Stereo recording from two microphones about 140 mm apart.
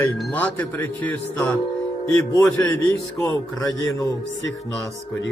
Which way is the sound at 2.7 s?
25° left (ahead or behind).